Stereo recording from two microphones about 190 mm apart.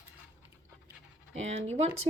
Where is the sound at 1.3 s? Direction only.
35° right (ahead or behind).